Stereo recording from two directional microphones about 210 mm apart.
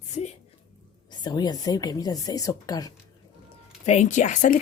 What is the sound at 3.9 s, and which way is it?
Speech, 35° left (ahead or behind).